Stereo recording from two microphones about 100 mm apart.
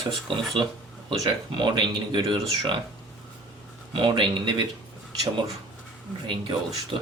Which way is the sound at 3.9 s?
55° right (ahead or behind).